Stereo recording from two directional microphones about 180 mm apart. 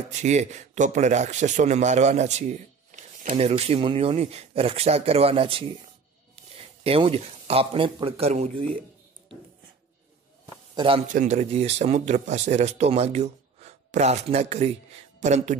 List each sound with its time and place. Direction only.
0.1 s speech: 40° right (ahead or behind)
10.7 s a sound: 25° right (ahead or behind)
11.1 s speech: 45° right (ahead or behind)